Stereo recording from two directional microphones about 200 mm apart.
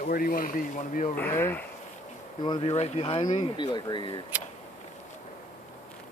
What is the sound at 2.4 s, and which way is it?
Speech, 20° left (ahead or behind).